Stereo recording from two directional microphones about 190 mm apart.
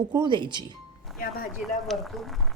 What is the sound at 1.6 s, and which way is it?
Speech, centre (ahead or behind).